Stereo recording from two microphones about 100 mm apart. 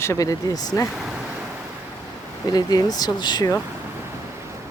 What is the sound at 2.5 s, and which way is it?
Speech, 40° left (ahead or behind).